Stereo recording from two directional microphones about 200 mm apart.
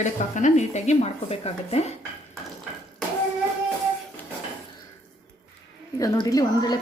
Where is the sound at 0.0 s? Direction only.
40° left (ahead or behind).